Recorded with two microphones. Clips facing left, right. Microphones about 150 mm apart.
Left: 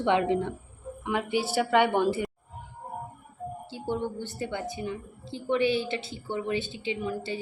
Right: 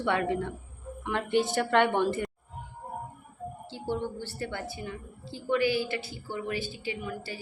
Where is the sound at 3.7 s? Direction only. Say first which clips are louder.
Left 1 dB; 15° left (ahead or behind).